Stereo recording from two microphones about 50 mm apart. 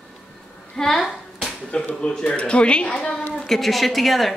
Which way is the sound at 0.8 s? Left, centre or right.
Centre.